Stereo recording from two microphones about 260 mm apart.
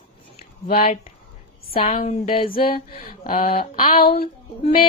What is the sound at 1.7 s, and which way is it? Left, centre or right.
Speech, left.